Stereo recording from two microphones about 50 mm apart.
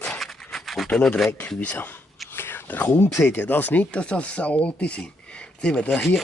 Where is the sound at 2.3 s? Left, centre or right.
Left.